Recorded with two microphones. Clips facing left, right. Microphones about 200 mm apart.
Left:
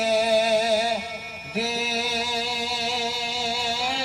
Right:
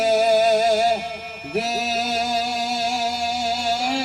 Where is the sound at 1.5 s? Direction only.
50° right (ahead or behind).